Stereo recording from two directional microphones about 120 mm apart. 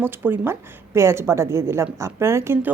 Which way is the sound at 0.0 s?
15° right (ahead or behind).